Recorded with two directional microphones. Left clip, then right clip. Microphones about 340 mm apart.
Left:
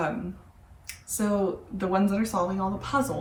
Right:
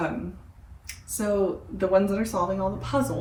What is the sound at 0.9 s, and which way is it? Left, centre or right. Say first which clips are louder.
Finger snapping: even; centre.